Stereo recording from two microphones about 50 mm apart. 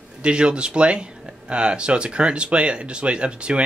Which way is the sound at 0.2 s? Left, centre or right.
Centre.